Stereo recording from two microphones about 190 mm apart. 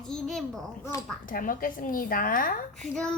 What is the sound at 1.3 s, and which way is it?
A woman's voice, 45° left (ahead or behind).